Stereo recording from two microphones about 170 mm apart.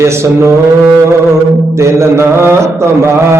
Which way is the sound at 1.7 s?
15° right (ahead or behind).